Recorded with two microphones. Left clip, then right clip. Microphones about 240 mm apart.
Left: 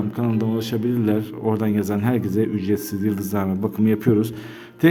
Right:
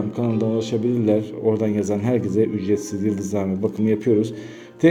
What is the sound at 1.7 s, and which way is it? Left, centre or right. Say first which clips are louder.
A man's voice: right 1 dB; centre.